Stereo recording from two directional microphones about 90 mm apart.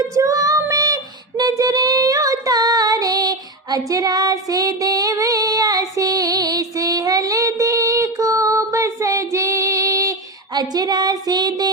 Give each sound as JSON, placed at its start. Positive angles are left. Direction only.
{"t": 0.0, "sound": "child singing", "side_deg": -40}